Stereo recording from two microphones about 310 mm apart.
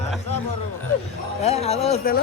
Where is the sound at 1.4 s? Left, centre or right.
Centre.